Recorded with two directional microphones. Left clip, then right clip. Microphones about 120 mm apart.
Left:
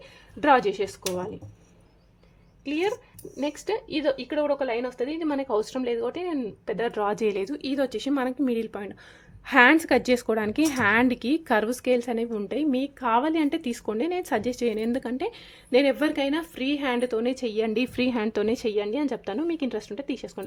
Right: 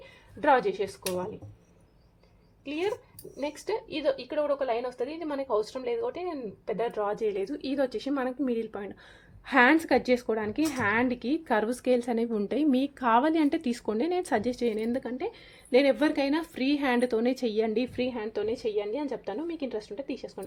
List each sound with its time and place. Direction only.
0.3 s a woman's voice: 55° left (ahead or behind)
2.6 s a woman's voice: 55° left (ahead or behind); by 7.3 s 90° left
7.3 s a woman's voice: 40° left (ahead or behind)
9.5 s a woman's voice: 20° left (ahead or behind)
10.0 s a woman's voice: 35° left (ahead or behind)
15.7 s a woman's voice: 20° left (ahead or behind); by 17.7 s 5° left (ahead or behind)
17.7 s a woman's voice: 30° left (ahead or behind)
17.9 s a woman's voice: 55° left (ahead or behind)